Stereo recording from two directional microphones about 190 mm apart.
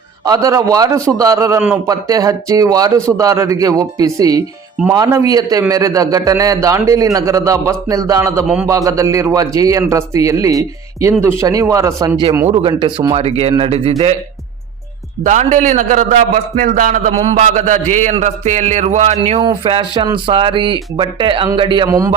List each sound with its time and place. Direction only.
0.3 s a man's voice: 20° right (ahead or behind)
15.2 s a man's voice: 40° right (ahead or behind)
19.2 s a man's voice: 25° right (ahead or behind)